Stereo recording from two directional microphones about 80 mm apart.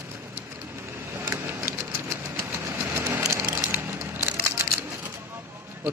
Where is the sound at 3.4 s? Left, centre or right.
Right.